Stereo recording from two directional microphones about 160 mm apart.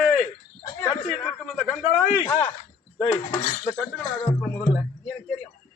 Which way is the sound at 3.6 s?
10° left (ahead or behind).